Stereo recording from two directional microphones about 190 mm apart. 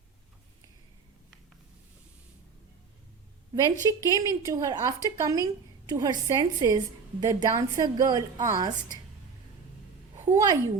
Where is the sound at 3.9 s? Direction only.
20° right (ahead or behind).